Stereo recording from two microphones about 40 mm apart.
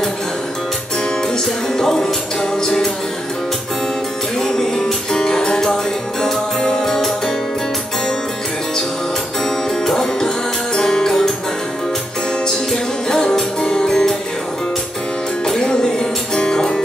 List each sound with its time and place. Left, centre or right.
1.8 s speech: centre
2.5 s music: centre
4.4 s music: centre
9.4 s music: centre
12.7 s music: centre
15.4 s music: centre